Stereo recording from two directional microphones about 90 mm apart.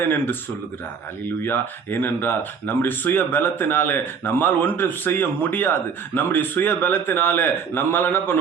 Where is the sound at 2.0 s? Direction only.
25° left (ahead or behind).